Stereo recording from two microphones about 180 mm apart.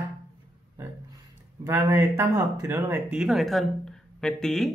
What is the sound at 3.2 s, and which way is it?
Speech, centre (ahead or behind).